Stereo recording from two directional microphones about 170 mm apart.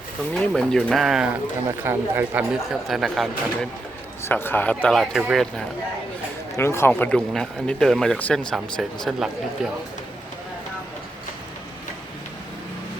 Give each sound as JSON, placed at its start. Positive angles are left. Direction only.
{"t": 0.3, "sound": "speech", "side_deg": 5}
{"t": 4.3, "sound": "speech", "side_deg": 10}
{"t": 6.6, "sound": "speech", "side_deg": 15}